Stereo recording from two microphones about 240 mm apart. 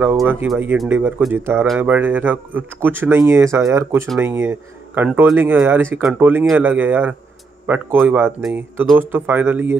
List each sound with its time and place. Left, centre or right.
0.0 s a man's voice: centre